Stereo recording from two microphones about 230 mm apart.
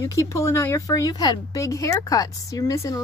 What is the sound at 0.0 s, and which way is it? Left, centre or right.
Speech, centre.